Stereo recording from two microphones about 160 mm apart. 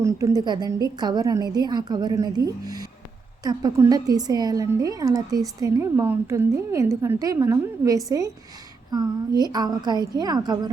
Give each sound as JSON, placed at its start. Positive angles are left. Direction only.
{"t": 0.0, "sound": "a woman's voice", "side_deg": -20}